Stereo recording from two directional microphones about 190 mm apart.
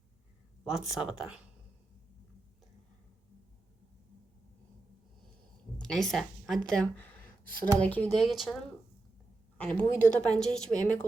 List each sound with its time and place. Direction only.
0.6 s speech: centre (ahead or behind)
5.7 s a woman's voice: 5° left (ahead or behind)
9.6 s a woman's voice: 5° left (ahead or behind)
10.0 s a woman's voice: 40° left (ahead or behind)
10.2 s speech: 5° left (ahead or behind)